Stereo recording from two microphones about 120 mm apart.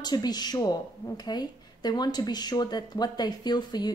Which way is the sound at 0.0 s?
35° left (ahead or behind).